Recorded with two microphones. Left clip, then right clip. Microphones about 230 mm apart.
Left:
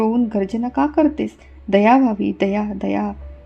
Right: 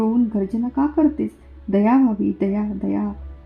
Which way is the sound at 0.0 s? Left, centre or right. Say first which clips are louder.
Left 2 dB; left.